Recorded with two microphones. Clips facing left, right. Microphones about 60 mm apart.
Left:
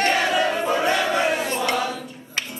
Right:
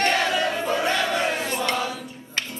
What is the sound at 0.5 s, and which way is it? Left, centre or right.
Crowd, centre.